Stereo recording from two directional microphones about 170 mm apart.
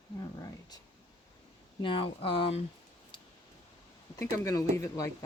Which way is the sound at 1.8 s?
30° left (ahead or behind).